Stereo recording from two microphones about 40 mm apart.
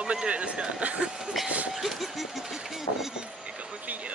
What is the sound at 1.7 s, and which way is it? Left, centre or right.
Speech, centre.